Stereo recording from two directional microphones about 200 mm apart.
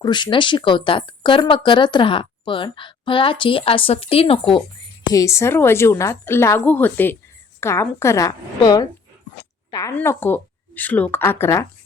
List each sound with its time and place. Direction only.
0.0 s speech: 20° left (ahead or behind)
5.0 s a woman's voice: 15° left (ahead or behind)